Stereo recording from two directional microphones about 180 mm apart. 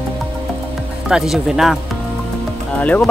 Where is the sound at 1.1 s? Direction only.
5° right (ahead or behind).